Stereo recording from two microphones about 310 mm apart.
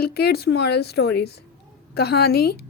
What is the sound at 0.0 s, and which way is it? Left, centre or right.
A woman's voice, left.